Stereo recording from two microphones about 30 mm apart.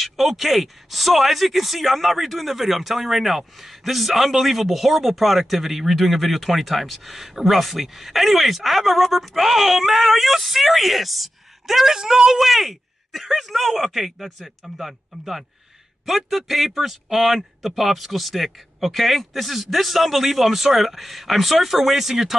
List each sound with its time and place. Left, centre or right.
0.0 s speech: centre
11.9 s a woman's voice: right
12.4 s speech: centre